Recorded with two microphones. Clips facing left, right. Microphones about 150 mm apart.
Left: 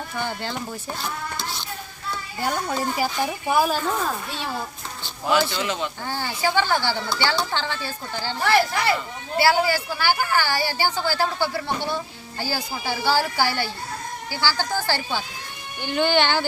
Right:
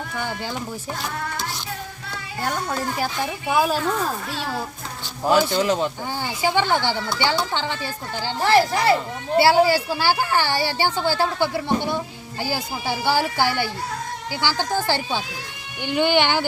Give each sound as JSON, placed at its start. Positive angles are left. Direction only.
{"t": 2.4, "sound": "speech", "side_deg": 5}
{"t": 5.0, "sound": "a sound", "side_deg": -40}
{"t": 5.5, "sound": "speech", "side_deg": -40}
{"t": 6.1, "sound": "a woman's voice", "side_deg": -15}
{"t": 8.4, "sound": "a woman's voice", "side_deg": -35}